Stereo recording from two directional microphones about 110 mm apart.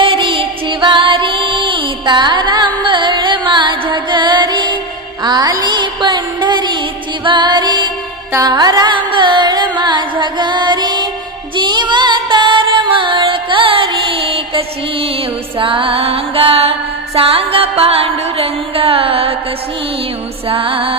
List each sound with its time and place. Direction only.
0.0 s music: 50° right (ahead or behind)
8.3 s carnatic music: 35° right (ahead or behind)
11.5 s music: 45° right (ahead or behind)
15.6 s music: 50° right (ahead or behind)
20.4 s music: 55° right (ahead or behind)